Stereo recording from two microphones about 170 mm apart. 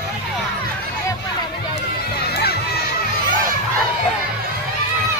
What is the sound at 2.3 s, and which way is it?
Crowd, 65° left (ahead or behind).